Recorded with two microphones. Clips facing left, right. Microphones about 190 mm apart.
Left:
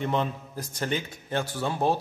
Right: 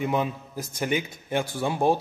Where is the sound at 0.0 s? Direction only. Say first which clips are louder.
Right 2 dB; 10° right (ahead or behind).